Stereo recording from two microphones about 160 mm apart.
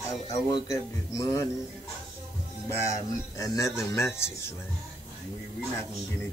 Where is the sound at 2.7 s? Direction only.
20° left (ahead or behind).